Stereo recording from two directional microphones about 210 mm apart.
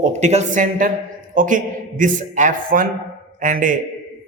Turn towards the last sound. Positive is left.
turn(degrees=-40)  # may be behind; listen again after turning